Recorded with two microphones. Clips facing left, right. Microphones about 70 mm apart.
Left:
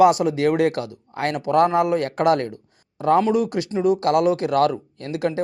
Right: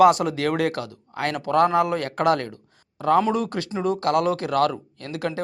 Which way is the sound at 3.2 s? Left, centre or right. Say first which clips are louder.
Left 4 dB; centre.